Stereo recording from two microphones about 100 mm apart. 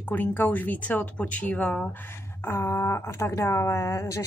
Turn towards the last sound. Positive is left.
turn(degrees=30)  # may be behind; listen again after turning